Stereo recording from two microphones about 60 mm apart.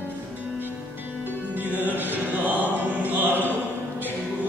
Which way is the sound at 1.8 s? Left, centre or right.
Right.